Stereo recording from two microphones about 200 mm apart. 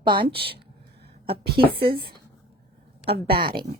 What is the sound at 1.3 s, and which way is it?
Speech, 50° right (ahead or behind).